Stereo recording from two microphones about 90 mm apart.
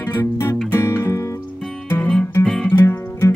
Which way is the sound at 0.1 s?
25° left (ahead or behind).